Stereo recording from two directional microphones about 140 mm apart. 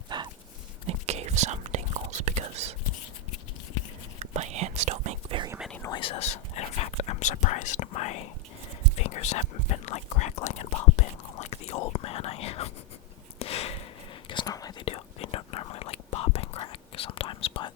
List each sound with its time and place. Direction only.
0.1 s dog: 30° right (ahead or behind)
0.9 s whispering: 50° right (ahead or behind)
4.2 s whispering: 55° right (ahead or behind)
5.3 s whispering: 40° right (ahead or behind)
5.9 s whispering: 40° left (ahead or behind)
13.4 s a sound: 45° left (ahead or behind)
14.3 s whispering: 30° left (ahead or behind)
14.8 s whispering: 45° left (ahead or behind)